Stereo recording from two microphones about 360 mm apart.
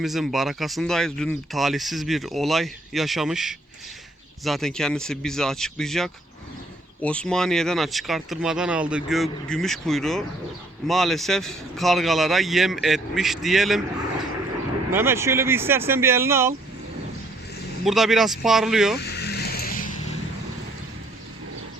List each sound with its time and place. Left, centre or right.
0.0 s speech: centre
14.9 s speech: centre
17.8 s speech: centre
19.0 s music: left